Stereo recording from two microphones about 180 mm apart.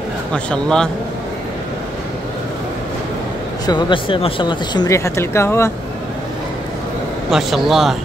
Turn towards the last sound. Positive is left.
turn(degrees=0)  # may be behind; listen again after turning